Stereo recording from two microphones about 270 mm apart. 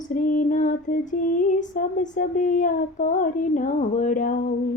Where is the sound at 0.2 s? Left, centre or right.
Left.